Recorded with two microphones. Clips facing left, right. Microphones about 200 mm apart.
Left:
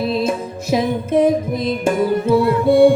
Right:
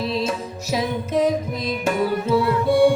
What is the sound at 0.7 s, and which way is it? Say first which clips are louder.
Music: left 6 dB; 55° left (ahead or behind).